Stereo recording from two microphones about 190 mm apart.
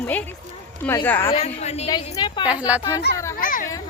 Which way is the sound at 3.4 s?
45° left (ahead or behind).